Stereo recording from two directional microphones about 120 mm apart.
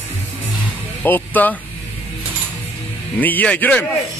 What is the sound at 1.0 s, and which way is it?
Speech, 15° left (ahead or behind).